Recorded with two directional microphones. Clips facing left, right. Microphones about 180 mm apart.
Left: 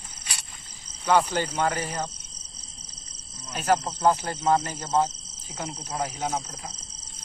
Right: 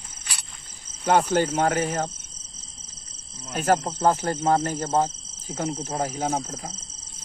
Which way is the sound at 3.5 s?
45° right (ahead or behind).